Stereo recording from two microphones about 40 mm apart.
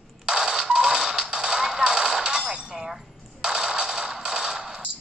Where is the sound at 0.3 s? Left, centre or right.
Right.